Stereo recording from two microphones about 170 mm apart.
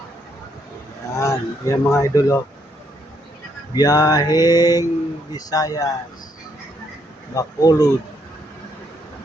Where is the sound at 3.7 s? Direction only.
20° left (ahead or behind).